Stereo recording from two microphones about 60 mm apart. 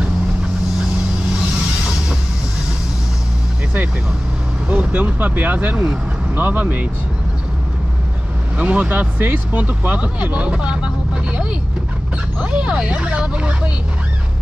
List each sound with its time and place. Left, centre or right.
4.6 s speech: right
8.5 s speech: right
12.4 s speech: centre